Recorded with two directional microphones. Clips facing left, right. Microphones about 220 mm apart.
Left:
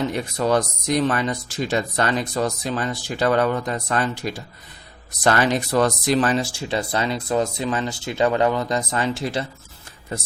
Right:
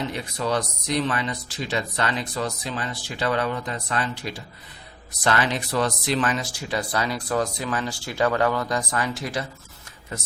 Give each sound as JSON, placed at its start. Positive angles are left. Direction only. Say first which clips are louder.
{"t": 0.3, "sound": "speech", "louder": "left 5 dB", "side_deg": 45}